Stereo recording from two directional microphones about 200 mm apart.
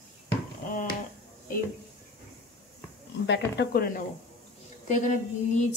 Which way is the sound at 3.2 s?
60° left (ahead or behind).